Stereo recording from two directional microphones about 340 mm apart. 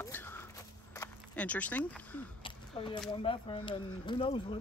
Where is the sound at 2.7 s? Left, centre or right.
Centre.